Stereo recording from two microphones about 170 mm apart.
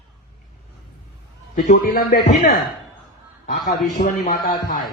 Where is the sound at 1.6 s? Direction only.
55° left (ahead or behind).